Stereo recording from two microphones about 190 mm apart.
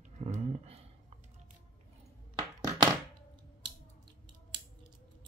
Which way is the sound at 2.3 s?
25° right (ahead or behind).